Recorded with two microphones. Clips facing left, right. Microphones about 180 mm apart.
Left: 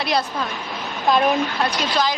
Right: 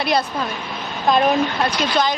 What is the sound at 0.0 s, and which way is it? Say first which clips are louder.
Speech: right 2 dB; centre (ahead or behind).